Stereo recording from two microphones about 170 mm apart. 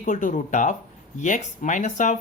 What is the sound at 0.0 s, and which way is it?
Speech, 50° left (ahead or behind).